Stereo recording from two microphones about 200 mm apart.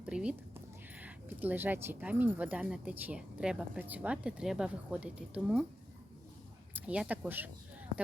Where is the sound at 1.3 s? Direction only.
10° right (ahead or behind).